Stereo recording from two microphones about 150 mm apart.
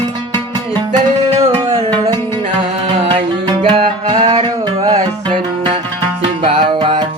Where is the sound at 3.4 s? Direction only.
35° right (ahead or behind).